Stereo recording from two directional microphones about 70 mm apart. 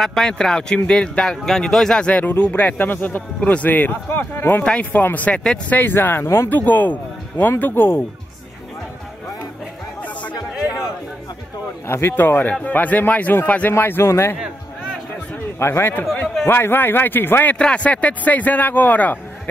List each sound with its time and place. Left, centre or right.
0.0 s speech: centre
5.7 s speech: left
6.2 s speech: left
6.5 s speech: left
11.9 s a man's voice: left
15.6 s a man's voice: left
17.6 s speech: centre